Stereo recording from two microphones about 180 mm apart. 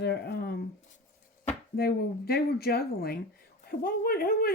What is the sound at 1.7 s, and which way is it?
Speech, 60° left (ahead or behind).